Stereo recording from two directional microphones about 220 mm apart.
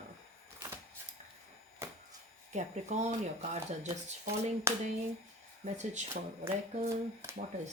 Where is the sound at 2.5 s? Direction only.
30° right (ahead or behind).